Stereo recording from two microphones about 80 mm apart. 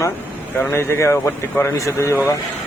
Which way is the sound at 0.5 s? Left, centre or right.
Left.